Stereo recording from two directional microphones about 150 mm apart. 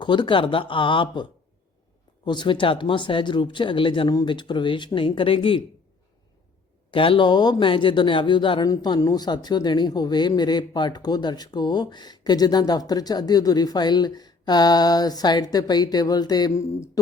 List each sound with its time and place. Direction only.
0.0 s speech: 30° left (ahead or behind)
6.9 s speech: 35° left (ahead or behind)